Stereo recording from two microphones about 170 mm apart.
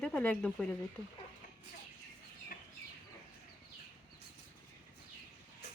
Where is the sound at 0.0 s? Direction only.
5° left (ahead or behind).